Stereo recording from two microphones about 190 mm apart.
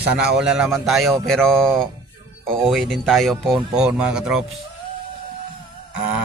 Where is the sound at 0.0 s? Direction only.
60° right (ahead or behind).